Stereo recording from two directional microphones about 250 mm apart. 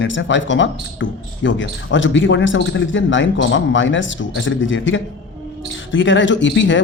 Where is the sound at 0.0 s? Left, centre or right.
Left.